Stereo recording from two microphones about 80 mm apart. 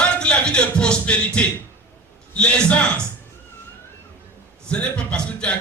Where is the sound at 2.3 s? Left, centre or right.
Centre.